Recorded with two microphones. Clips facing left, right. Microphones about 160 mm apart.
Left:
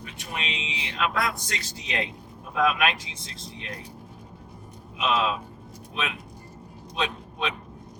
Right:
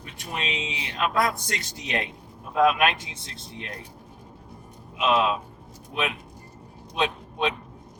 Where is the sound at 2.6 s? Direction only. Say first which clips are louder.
Right 3 dB; 25° right (ahead or behind).